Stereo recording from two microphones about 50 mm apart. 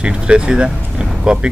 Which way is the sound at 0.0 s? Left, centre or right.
Centre.